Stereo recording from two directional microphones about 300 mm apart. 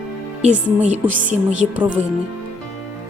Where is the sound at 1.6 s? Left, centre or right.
Centre.